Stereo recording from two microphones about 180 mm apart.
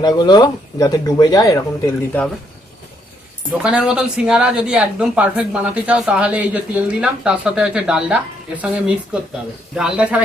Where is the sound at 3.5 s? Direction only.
5° right (ahead or behind).